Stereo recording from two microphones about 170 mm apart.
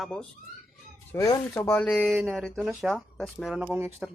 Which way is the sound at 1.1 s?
15° left (ahead or behind).